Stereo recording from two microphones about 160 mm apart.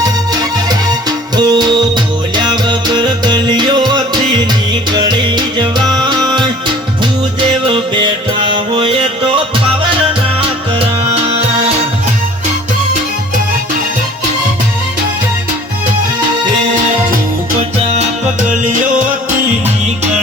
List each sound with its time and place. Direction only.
1.4 s music: 25° right (ahead or behind)
7.7 s music: 35° right (ahead or behind)
10.8 s music: 40° right (ahead or behind)
18.4 s music: 55° right (ahead or behind)